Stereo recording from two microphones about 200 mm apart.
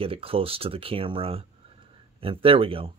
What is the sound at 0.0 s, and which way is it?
Speech, 30° right (ahead or behind).